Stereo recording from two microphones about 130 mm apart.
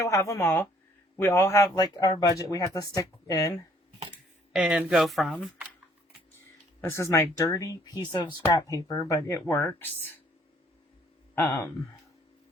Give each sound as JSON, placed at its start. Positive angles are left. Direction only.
{"t": 0.0, "sound": "speech", "side_deg": 25}
{"t": 4.5, "sound": "speech", "side_deg": -5}
{"t": 6.8, "sound": "speech", "side_deg": 25}
{"t": 11.3, "sound": "speech", "side_deg": 15}